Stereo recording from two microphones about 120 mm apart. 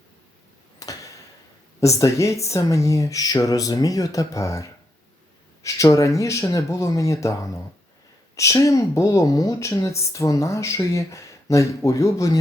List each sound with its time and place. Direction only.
0.8 s a sound: 30° left (ahead or behind)
1.8 s speech: 25° left (ahead or behind)
8.4 s speech: 25° left (ahead or behind)